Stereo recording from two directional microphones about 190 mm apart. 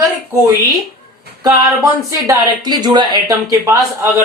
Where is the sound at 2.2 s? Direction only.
20° right (ahead or behind).